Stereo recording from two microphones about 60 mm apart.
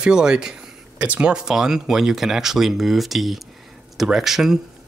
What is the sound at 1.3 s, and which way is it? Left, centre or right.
Speech, centre.